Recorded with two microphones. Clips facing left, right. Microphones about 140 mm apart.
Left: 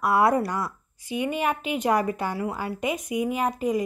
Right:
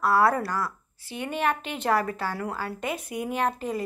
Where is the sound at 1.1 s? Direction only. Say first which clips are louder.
Left 2 dB; 5° left (ahead or behind).